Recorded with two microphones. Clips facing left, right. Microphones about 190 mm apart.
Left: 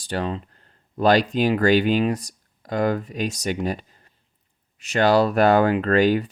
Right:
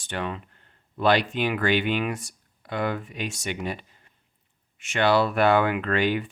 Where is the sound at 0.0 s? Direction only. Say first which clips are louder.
Left 5 dB; 35° left (ahead or behind).